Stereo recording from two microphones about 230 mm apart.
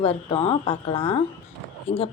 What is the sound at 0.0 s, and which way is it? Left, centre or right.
A woman's voice, left.